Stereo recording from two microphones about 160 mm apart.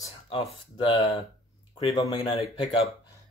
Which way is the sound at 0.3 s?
35° left (ahead or behind).